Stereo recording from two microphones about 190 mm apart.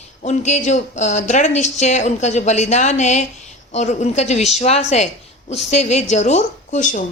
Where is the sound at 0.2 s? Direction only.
40° left (ahead or behind).